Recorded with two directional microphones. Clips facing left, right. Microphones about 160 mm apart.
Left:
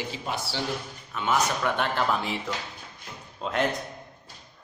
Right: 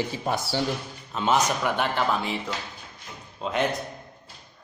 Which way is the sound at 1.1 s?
25° right (ahead or behind).